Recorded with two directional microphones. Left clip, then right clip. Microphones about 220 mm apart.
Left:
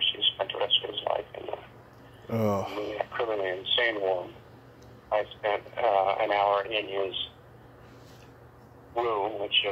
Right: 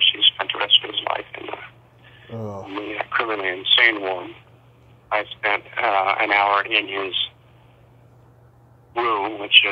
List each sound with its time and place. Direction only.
0.1 s a sound: 20° right (ahead or behind)
2.3 s speech: 15° left (ahead or behind)
2.9 s speech: 20° right (ahead or behind)
8.9 s speech: 20° right (ahead or behind)